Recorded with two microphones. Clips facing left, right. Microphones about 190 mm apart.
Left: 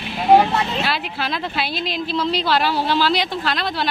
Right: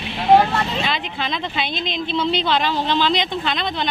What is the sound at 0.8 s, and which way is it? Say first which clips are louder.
Speech: even; 5° left (ahead or behind).